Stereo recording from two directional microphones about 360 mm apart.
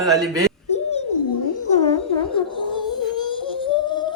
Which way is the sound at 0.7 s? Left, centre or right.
Centre.